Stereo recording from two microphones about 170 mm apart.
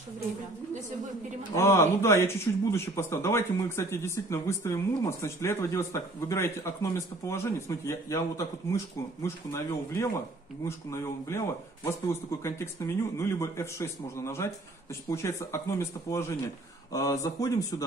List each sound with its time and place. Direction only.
1.5 s speech: 15° left (ahead or behind)